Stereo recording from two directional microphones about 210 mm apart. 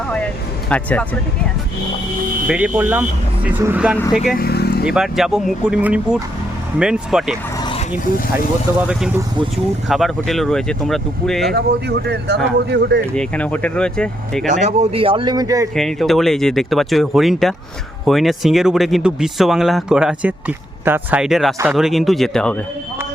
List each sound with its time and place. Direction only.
0.7 s speech: 5° left (ahead or behind)
2.5 s speech: 5° right (ahead or behind)
4.4 s vehicle: 50° left (ahead or behind)
4.9 s speech: centre (ahead or behind)
9.9 s speech: centre (ahead or behind)
11.5 s speech: 50° right (ahead or behind)
13.1 s speech: 5° left (ahead or behind)
14.4 s speech: 35° right (ahead or behind); by 15.7 s 15° right (ahead or behind)
15.7 s speech: centre (ahead or behind)